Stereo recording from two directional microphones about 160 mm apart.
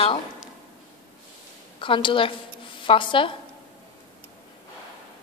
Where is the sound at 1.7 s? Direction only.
30° left (ahead or behind).